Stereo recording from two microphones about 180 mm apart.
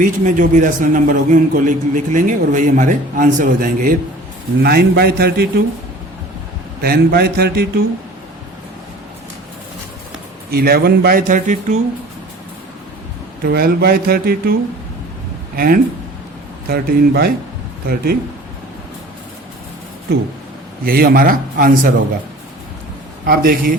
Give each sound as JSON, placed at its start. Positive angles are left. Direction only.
{"t": 0.0, "sound": "a man's voice", "side_deg": -45}
{"t": 4.6, "sound": "speech", "side_deg": -60}
{"t": 6.8, "sound": "speech", "side_deg": -55}
{"t": 10.5, "sound": "a man's voice", "side_deg": -60}
{"t": 13.4, "sound": "speech", "side_deg": -55}
{"t": 15.5, "sound": "a man's voice", "side_deg": -50}
{"t": 20.8, "sound": "a man's voice", "side_deg": -55}
{"t": 23.2, "sound": "a man's voice", "side_deg": -55}